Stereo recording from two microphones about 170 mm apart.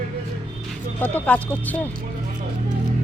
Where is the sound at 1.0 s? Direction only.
10° left (ahead or behind).